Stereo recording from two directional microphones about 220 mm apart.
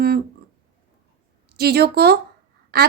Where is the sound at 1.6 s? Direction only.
45° right (ahead or behind).